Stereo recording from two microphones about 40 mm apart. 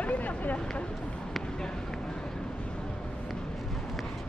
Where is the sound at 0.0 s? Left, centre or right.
Left.